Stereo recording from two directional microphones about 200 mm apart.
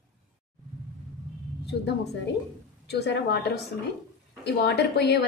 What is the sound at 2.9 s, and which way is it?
A woman's voice, 55° left (ahead or behind).